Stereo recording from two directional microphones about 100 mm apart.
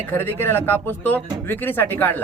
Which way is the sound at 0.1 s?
20° left (ahead or behind).